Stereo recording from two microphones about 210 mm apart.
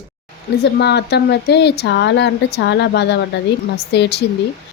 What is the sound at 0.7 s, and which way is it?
Speech, 50° left (ahead or behind).